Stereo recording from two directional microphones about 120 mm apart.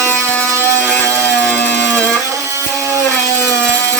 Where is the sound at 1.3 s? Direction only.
10° left (ahead or behind).